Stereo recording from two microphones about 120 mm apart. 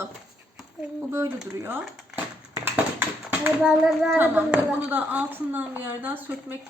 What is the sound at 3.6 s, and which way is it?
A child's voice, 5° right (ahead or behind).